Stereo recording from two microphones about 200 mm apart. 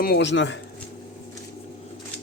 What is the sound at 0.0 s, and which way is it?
Speech, 55° left (ahead or behind).